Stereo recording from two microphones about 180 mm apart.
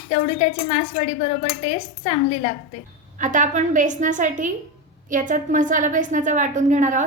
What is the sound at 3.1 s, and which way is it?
A woman's voice, 45° right (ahead or behind).